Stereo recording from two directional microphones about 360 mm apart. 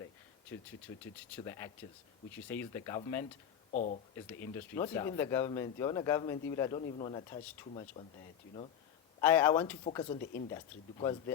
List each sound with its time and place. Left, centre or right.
1.4 s speech: centre
3.7 s speech: left
4.1 s speech: centre
9.2 s speech: centre